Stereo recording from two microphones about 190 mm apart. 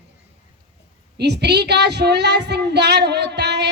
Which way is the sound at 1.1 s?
60° right (ahead or behind).